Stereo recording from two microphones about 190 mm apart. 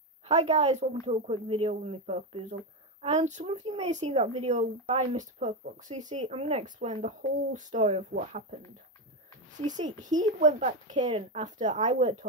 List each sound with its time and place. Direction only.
0.3 s speech: 35° right (ahead or behind)
9.7 s speech: 40° right (ahead or behind)
11.0 s speech: 30° right (ahead or behind)
11.4 s speech: 40° right (ahead or behind)